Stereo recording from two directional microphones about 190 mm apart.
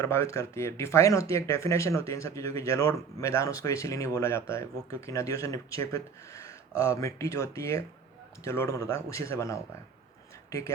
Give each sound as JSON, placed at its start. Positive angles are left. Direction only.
{"t": 0.0, "sound": "speech", "side_deg": 15}